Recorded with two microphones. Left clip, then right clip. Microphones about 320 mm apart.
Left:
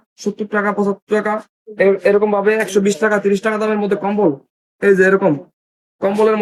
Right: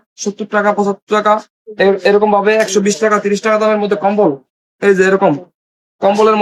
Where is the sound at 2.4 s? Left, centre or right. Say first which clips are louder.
Right 4 dB; centre.